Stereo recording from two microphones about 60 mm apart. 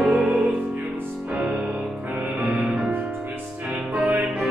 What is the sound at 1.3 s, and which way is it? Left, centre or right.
Music, centre.